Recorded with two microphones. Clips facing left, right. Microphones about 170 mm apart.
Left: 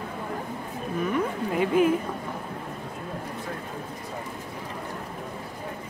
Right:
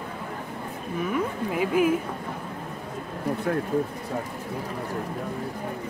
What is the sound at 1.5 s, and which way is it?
Speech, 5° right (ahead or behind).